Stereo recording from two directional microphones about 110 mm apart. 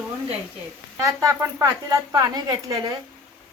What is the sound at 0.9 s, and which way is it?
Speech, 30° right (ahead or behind).